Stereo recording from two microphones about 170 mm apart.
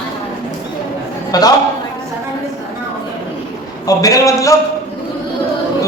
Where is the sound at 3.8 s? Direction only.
20° left (ahead or behind).